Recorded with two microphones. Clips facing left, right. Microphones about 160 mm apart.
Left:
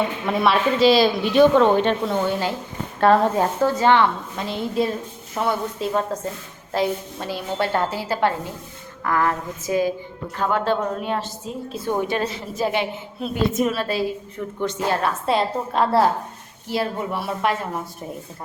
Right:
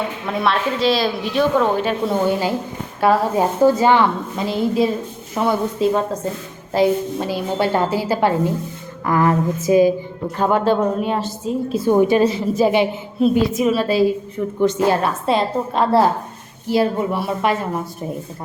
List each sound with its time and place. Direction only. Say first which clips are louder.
0.3 s a woman's voice: left 1 dB; centre (ahead or behind); by 10.6 s 20° right (ahead or behind)
11.0 s a woman's voice: right 5 dB; centre (ahead or behind)
15.0 s a woman's voice: right 2 dB; 5° left (ahead or behind)